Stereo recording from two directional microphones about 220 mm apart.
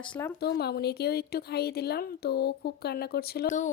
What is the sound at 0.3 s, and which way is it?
A woman's voice, 45° left (ahead or behind).